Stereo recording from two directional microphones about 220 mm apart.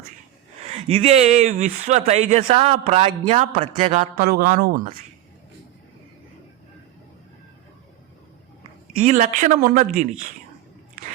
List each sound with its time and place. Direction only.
0.7 s speech: 25° right (ahead or behind)
4.2 s speech: 40° right (ahead or behind)
9.0 s speech: 35° right (ahead or behind)